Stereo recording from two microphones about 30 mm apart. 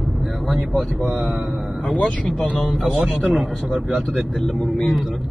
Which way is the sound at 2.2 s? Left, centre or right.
Left.